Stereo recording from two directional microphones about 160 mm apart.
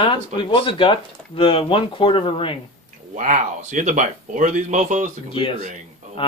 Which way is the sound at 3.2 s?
50° right (ahead or behind).